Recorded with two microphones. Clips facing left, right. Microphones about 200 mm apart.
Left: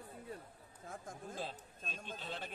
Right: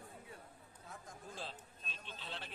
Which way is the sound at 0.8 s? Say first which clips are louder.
Left 5 dB; 50° left (ahead or behind).